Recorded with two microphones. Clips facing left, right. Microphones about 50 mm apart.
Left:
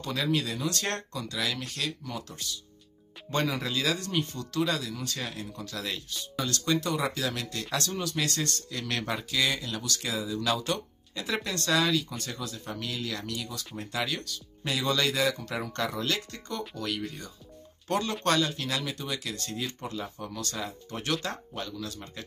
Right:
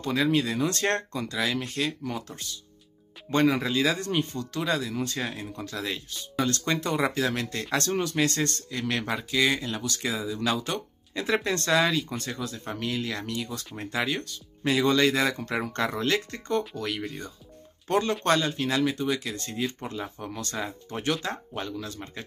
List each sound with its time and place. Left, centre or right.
0.0 s speech: centre
4.9 s speech: right
6.4 s speech: right
8.6 s speech: centre
11.1 s speech: right
12.4 s speech: right
16.8 s speech: right
20.5 s speech: centre